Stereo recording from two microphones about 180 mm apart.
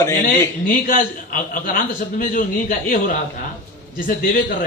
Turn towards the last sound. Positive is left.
turn(degrees=50)  # may be behind; listen again after turning